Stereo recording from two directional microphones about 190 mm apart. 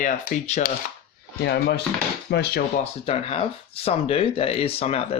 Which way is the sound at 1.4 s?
60° left (ahead or behind).